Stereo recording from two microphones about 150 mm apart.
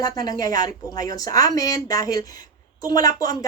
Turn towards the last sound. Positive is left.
turn(degrees=25)  # may be behind; listen again after turning